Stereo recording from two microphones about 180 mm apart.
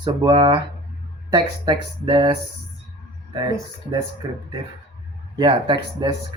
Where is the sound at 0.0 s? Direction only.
25° right (ahead or behind).